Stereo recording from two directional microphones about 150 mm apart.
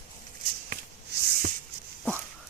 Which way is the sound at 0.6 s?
75° right (ahead or behind).